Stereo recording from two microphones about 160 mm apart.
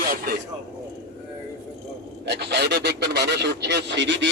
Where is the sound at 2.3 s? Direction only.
90° right.